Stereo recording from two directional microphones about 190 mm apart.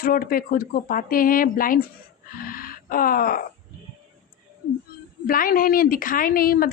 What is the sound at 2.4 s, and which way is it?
Groan, 50° left (ahead or behind).